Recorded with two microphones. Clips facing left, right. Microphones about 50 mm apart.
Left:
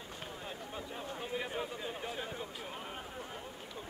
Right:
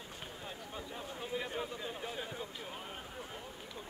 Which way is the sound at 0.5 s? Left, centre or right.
Centre.